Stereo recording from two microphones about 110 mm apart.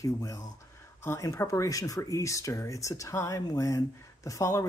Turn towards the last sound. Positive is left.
turn(degrees=30)  # may be behind; listen again after turning